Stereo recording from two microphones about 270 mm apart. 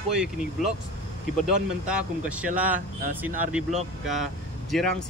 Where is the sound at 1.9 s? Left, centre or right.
Centre.